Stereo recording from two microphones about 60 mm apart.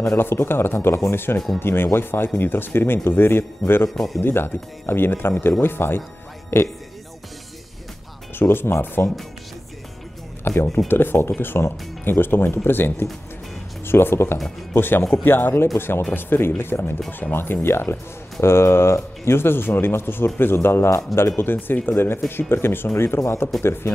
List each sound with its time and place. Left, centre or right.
0.2 s speech: left
3.9 s speech: centre
4.2 s speech: left
8.4 s speech: left
10.4 s speech: left